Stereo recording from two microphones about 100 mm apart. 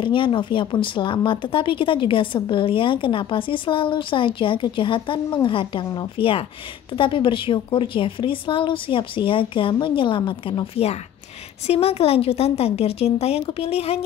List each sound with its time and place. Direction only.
0.0 s speech: 55° left (ahead or behind)
11.6 s a woman's voice: 90° left